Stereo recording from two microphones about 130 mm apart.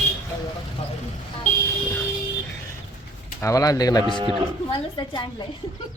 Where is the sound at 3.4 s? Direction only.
25° left (ahead or behind).